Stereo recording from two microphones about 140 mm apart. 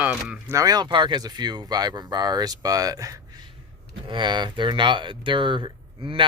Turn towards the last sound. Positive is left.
turn(degrees=-35)  # may be behind; listen again after turning